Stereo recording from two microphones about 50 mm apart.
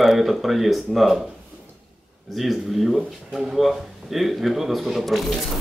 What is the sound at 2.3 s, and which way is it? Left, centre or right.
A man's voice, centre.